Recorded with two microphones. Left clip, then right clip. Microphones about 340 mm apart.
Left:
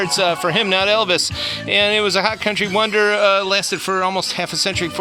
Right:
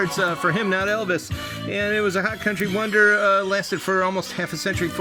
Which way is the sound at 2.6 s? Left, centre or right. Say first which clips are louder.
Left 2 dB; centre.